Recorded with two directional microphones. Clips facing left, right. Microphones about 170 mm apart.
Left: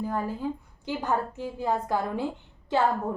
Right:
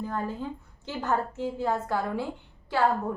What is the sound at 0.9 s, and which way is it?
A woman's voice, 15° left (ahead or behind).